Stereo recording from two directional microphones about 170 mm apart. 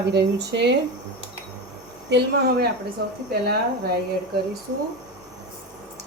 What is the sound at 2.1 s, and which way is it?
A woman's voice, 80° right.